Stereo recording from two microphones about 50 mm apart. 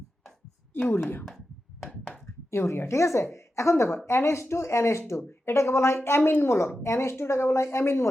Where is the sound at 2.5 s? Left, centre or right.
Left.